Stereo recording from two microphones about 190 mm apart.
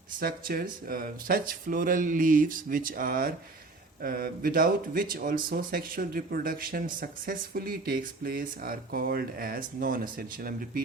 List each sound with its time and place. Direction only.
0.2 s speech: 50° right (ahead or behind)